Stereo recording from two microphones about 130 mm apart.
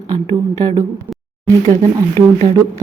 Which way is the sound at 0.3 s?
50° right (ahead or behind).